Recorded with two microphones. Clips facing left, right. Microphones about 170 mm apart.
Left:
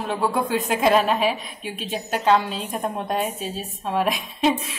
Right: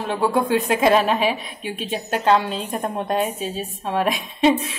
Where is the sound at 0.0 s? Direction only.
Centre (ahead or behind).